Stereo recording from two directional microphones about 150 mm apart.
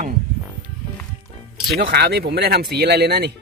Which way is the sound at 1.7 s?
90° right.